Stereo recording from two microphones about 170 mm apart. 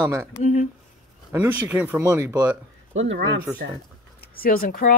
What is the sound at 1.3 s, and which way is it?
Speech, 10° right (ahead or behind).